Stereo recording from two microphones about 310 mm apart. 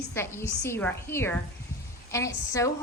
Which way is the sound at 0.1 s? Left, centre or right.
Centre.